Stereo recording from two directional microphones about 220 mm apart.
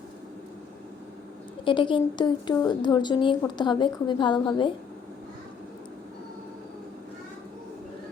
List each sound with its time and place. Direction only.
1.6 s a woman's voice: 20° left (ahead or behind)